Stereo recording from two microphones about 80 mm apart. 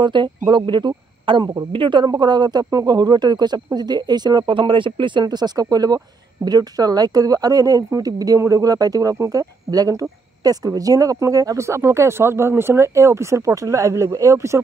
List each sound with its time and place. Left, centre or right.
0.0 s speech: right